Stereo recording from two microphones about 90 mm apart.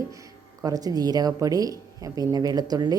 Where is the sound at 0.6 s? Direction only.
45° right (ahead or behind).